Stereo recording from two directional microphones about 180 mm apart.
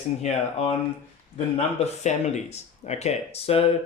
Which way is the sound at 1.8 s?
40° left (ahead or behind).